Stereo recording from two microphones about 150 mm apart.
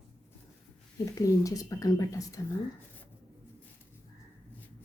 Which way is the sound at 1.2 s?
25° left (ahead or behind).